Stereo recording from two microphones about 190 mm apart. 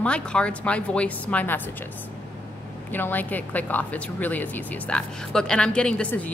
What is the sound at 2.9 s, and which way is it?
A woman's voice, 10° left (ahead or behind).